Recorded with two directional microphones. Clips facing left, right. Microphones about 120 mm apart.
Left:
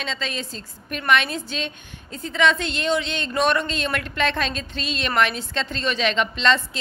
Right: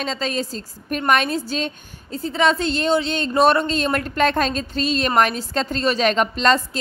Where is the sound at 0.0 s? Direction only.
40° right (ahead or behind).